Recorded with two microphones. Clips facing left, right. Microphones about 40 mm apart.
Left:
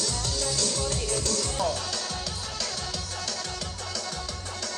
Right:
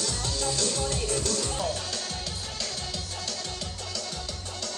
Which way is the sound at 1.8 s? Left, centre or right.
Left.